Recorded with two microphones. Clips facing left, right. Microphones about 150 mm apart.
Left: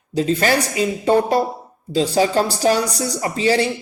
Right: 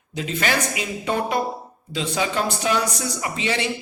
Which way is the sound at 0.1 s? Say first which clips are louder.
Left 7 dB; 35° left (ahead or behind).